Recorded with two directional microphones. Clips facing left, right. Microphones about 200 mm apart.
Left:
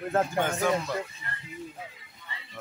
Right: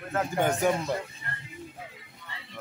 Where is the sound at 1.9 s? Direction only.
60° right (ahead or behind).